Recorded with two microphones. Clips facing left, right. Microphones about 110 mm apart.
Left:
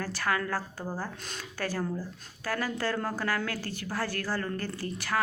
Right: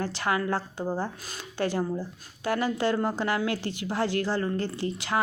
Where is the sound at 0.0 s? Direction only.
20° right (ahead or behind).